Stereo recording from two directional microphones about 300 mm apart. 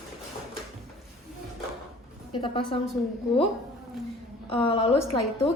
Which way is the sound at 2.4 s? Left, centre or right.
Centre.